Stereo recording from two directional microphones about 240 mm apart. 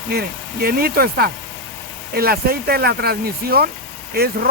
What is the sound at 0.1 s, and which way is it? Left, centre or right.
Speech, right.